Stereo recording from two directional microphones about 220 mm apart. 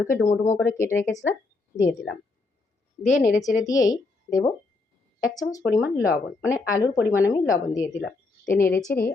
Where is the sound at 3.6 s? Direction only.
15° left (ahead or behind).